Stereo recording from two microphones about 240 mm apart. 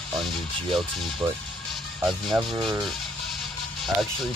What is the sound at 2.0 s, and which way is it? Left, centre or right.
Speech, centre.